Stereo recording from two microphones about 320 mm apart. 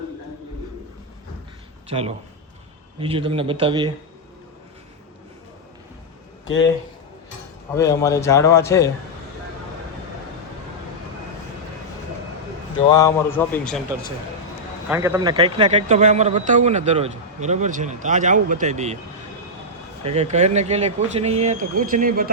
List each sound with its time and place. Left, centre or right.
1.9 s speech: centre
7.8 s a man's voice: centre
12.9 s a man's voice: centre
14.8 s a man's voice: centre
20.1 s a man's voice: right